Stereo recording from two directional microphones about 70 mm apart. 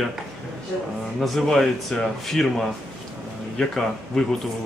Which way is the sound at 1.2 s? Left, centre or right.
Centre.